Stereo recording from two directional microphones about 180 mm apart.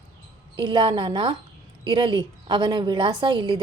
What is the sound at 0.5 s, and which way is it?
A woman's voice, 25° right (ahead or behind).